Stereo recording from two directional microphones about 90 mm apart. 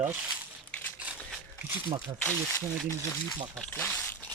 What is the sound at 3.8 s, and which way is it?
Speech, 25° left (ahead or behind).